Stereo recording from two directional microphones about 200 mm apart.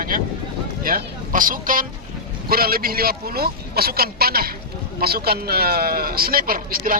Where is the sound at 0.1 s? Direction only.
40° right (ahead or behind).